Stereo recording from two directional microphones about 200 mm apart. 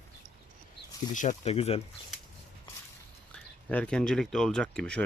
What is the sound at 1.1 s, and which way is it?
Speech, 35° left (ahead or behind).